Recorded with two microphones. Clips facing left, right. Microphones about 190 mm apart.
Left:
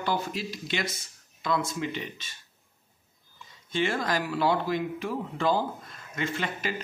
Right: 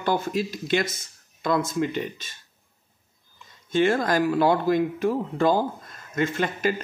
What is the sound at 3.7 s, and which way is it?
Speech, 45° right (ahead or behind).